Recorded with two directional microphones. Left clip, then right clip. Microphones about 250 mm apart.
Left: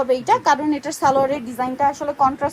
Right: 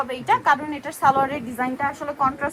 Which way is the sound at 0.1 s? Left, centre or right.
Left.